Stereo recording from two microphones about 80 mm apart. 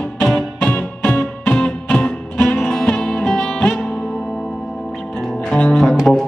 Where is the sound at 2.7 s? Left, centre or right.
Centre.